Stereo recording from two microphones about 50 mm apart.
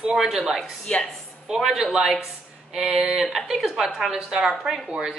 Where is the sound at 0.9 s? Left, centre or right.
Left.